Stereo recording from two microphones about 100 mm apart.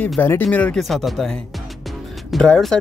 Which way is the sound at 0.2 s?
20° left (ahead or behind).